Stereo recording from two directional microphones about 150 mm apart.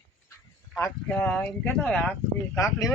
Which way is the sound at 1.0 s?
5° left (ahead or behind).